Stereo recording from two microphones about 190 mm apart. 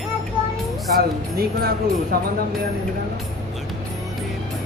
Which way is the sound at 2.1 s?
55° right (ahead or behind).